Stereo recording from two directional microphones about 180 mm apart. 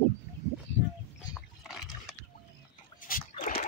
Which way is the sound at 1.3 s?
Centre (ahead or behind).